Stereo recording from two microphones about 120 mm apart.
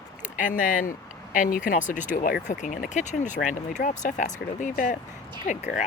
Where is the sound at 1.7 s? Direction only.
90° left.